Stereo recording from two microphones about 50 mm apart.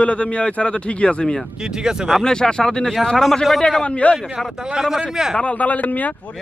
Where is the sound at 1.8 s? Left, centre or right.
Centre.